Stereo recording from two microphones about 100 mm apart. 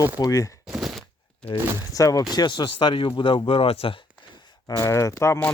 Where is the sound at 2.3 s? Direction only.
50° left (ahead or behind); by 3.9 s 70° left (ahead or behind).